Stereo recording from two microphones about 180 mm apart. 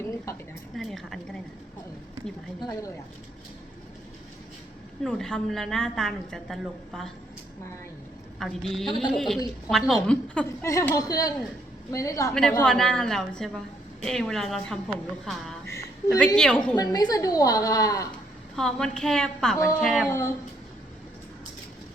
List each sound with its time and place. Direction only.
0.3 s a sound: 15° left (ahead or behind)
0.8 s a sound: centre (ahead or behind)
2.6 s a woman's voice: 20° left (ahead or behind)
5.0 s a woman's voice: 5° left (ahead or behind)
8.4 s a woman's voice: centre (ahead or behind)
10.6 s a woman's voice: 15° left (ahead or behind)
12.3 s a woman's voice: 5° left (ahead or behind)
16.7 s a woman's voice: 20° left (ahead or behind)
18.5 s a woman's voice: 5° left (ahead or behind)